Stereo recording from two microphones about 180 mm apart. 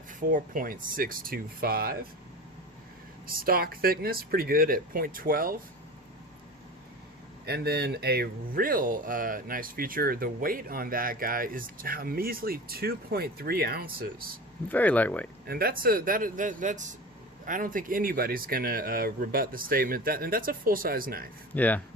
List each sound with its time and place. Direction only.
0.1 s speech: 45° right (ahead or behind)
3.2 s speech: 55° right (ahead or behind)
7.4 s speech: 60° right (ahead or behind)
14.7 s speech: 10° left (ahead or behind)
15.4 s speech: 55° right (ahead or behind)
21.5 s speech: 10° left (ahead or behind)